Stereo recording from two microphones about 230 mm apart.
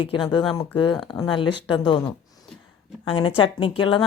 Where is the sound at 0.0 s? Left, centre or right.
Centre.